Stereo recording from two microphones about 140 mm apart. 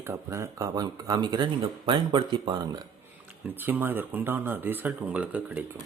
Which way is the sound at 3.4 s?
15° right (ahead or behind).